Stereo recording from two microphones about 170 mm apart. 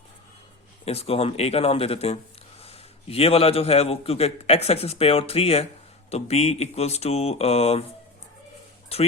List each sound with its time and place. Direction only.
0.9 s a man's voice: 35° left (ahead or behind)
8.9 s a man's voice: 35° left (ahead or behind)